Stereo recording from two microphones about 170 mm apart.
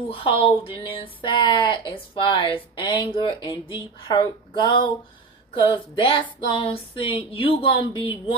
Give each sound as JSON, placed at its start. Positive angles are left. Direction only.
{"t": 0.1, "sound": "speech", "side_deg": 30}